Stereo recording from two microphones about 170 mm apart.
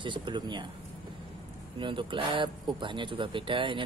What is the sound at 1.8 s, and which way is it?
Speech, 30° right (ahead or behind).